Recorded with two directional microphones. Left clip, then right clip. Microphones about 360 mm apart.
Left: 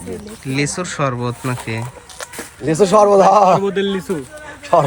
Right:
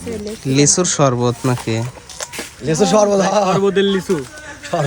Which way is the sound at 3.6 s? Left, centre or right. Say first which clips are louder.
Right 4 dB; centre.